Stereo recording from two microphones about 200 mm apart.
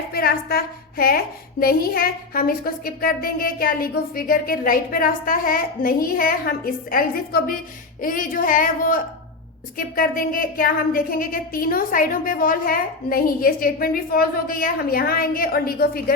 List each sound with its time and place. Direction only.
0.1 s a woman's voice: 50° left (ahead or behind)